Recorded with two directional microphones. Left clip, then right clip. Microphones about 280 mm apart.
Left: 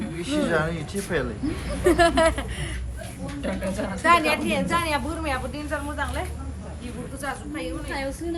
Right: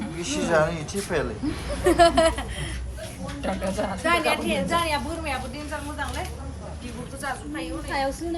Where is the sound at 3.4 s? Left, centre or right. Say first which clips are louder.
Right 2 dB; centre.